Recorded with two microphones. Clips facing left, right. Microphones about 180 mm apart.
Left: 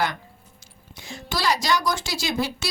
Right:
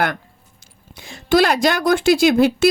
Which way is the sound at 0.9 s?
55° right (ahead or behind).